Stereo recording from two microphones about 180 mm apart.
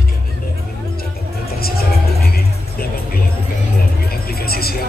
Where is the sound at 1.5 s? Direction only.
60° left (ahead or behind).